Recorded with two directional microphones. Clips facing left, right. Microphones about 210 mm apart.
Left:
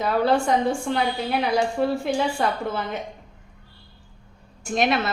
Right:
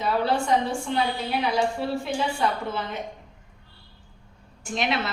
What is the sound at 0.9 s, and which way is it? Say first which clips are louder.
A woman's voice: left 2 dB; 45° left (ahead or behind).